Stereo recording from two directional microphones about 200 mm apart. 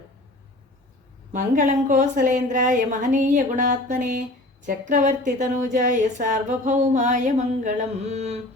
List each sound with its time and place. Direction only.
1.3 s a woman's voice: 40° right (ahead or behind)